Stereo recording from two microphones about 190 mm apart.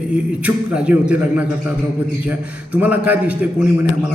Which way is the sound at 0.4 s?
5° right (ahead or behind).